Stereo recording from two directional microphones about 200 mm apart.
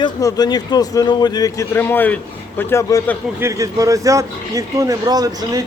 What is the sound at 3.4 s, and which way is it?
Speech, 15° right (ahead or behind).